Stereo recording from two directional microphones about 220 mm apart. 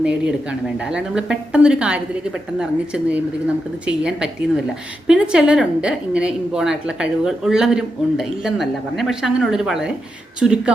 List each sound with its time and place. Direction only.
0.0 s a woman's voice: 5° right (ahead or behind)